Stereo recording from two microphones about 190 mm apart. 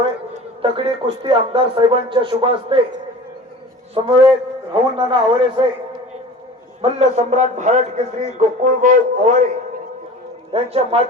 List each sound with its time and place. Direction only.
0.6 s speech: 30° right (ahead or behind)
3.9 s speech: 25° right (ahead or behind)
6.8 s a man's voice: 35° right (ahead or behind)
10.5 s a man's voice: 30° right (ahead or behind)